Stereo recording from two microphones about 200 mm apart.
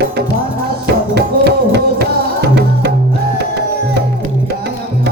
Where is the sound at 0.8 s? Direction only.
55° right (ahead or behind).